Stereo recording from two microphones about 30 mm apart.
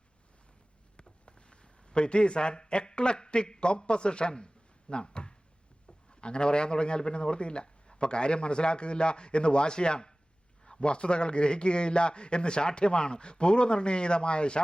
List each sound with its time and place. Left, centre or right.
1.2 s a man's voice: left